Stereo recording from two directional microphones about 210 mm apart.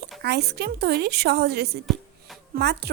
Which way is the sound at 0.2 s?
50° right (ahead or behind).